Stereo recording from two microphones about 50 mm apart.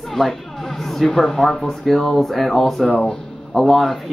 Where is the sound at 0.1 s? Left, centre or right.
Centre.